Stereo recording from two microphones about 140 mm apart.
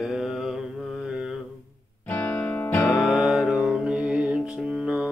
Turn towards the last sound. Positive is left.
turn(degrees=-5)  # may be behind; listen again after turning